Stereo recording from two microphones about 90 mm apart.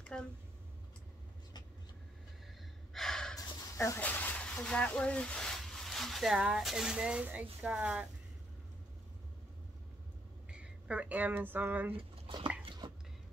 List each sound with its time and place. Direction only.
0.0 s a sound: 10° left (ahead or behind)
2.9 s gasp: 5° left (ahead or behind)
3.7 s speech: 30° left (ahead or behind)
4.0 s speech: 20° left (ahead or behind); by 8.1 s 10° right (ahead or behind)
10.5 s speech: 10° right (ahead or behind)
11.9 s speech: 70° right (ahead or behind)
12.8 s stir: 60° right (ahead or behind)